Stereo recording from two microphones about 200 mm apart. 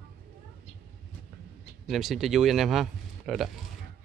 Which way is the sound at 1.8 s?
Centre (ahead or behind).